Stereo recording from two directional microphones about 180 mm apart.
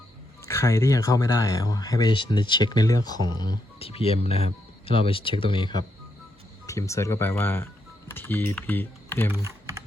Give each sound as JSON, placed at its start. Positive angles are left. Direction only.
{"t": 0.4, "sound": "speech", "side_deg": 15}